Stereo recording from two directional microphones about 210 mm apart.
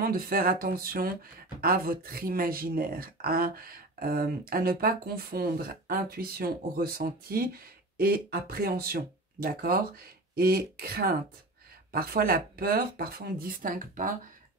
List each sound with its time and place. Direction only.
0.0 s speech: 45° right (ahead or behind)